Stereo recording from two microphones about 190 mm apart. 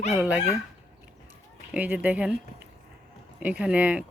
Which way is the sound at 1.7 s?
5° right (ahead or behind).